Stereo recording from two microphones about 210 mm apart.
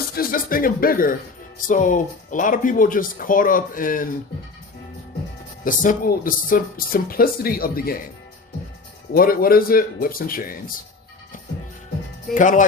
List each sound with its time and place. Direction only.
0.2 s speech: 45° left (ahead or behind)
5.6 s speech: 40° left (ahead or behind)
9.1 s speech: 45° left (ahead or behind)
12.3 s speech: 40° left (ahead or behind)